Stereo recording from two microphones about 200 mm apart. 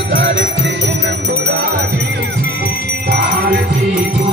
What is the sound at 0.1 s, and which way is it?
Music, 55° right (ahead or behind).